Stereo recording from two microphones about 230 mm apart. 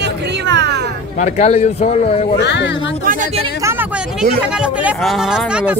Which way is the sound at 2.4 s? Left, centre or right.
Left.